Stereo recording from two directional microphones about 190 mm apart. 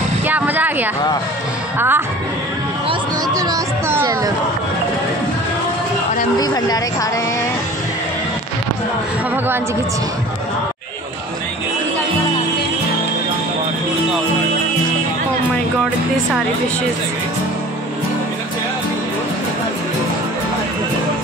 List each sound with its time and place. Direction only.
0.2 s speech: 10° right (ahead or behind)
2.9 s music: 20° right (ahead or behind)
6.4 s a woman's voice: 20° left (ahead or behind)